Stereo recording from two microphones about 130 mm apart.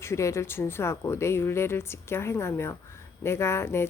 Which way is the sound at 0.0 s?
20° left (ahead or behind).